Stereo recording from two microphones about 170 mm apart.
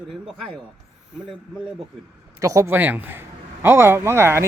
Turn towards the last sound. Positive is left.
turn(degrees=-15)  # may be behind; listen again after turning